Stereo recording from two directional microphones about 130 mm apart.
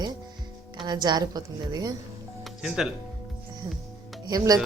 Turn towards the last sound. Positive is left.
turn(degrees=-30)  # may be behind; listen again after turning